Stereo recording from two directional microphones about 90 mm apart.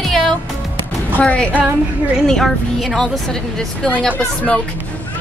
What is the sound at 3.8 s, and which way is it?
Speech, 15° left (ahead or behind).